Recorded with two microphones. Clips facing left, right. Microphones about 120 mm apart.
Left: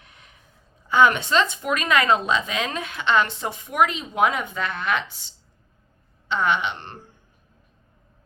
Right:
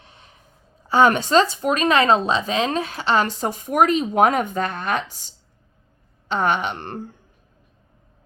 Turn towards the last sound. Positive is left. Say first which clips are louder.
# right 3 dB
turn(degrees=-50)  # may be behind; listen again after turning